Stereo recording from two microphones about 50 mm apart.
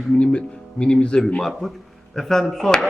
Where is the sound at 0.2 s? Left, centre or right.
Left.